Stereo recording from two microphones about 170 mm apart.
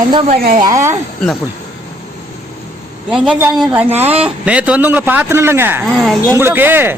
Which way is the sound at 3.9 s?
35° right (ahead or behind).